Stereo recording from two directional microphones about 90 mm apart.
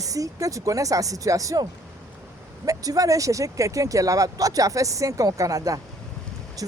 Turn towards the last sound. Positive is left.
turn(degrees=-40)  # may be behind; listen again after turning